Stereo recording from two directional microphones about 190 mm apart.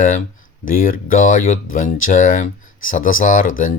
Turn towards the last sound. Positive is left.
turn(degrees=45)  # may be behind; listen again after turning